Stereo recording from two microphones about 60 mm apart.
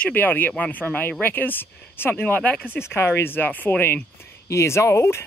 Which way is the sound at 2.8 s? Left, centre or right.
Left.